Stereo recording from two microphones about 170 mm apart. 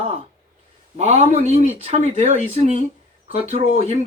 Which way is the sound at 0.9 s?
40° right (ahead or behind).